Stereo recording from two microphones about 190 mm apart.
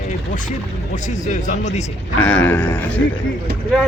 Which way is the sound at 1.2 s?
40° left (ahead or behind).